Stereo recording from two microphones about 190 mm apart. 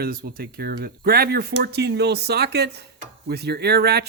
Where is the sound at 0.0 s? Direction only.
50° right (ahead or behind).